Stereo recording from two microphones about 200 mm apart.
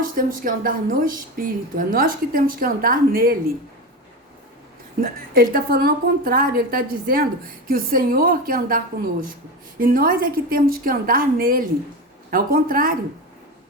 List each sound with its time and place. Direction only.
0.0 s a woman's voice: 45° right (ahead or behind)
4.9 s a woman's voice: 45° right (ahead or behind)